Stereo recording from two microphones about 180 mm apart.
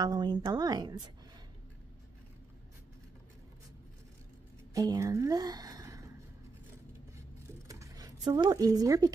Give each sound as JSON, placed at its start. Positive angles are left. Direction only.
{"t": 0.0, "sound": "a woman's voice", "side_deg": -25}
{"t": 4.7, "sound": "a woman's voice", "side_deg": -20}
{"t": 7.6, "sound": "a sound", "side_deg": -20}